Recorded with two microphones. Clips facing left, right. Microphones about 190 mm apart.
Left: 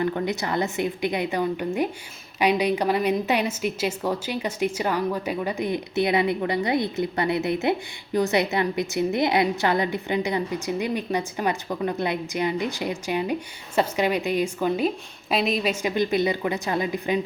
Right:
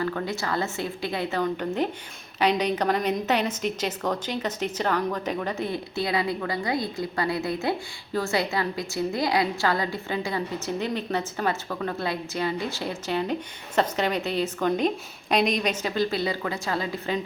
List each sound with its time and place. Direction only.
0.0 s a woman's voice: 20° left (ahead or behind)